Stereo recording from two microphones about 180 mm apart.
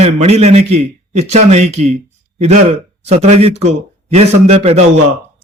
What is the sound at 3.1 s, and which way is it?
A man's voice, 35° right (ahead or behind).